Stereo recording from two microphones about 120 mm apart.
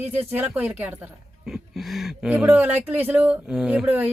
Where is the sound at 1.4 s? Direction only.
Centre (ahead or behind).